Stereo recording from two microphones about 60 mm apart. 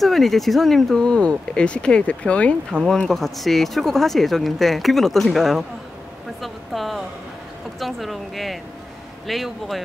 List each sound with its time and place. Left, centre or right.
0.0 s speech: centre
3.1 s speech: centre